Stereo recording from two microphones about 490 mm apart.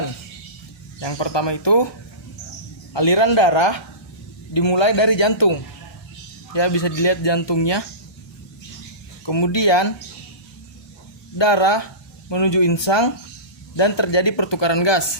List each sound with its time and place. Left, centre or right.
0.9 s speech: left
2.9 s speech: left
9.2 s speech: left
11.3 s speech: left